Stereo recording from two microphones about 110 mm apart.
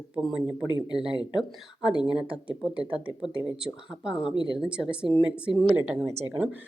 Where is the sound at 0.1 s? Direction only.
5° right (ahead or behind).